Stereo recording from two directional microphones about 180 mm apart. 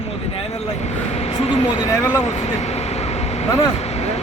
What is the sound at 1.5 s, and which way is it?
Speech, 35° left (ahead or behind).